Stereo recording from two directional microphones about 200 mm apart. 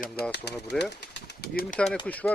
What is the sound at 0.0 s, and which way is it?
Speech, 50° left (ahead or behind).